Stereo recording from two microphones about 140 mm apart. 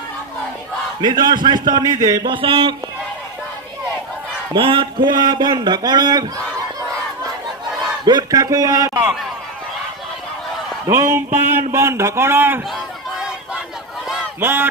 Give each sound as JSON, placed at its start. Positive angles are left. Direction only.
{"t": 1.0, "sound": "a man's voice", "side_deg": -30}
{"t": 4.5, "sound": "a man's voice", "side_deg": -40}
{"t": 7.4, "sound": "a sound", "side_deg": -30}
{"t": 10.8, "sound": "a man's voice", "side_deg": -20}
{"t": 14.4, "sound": "a man's voice", "side_deg": -15}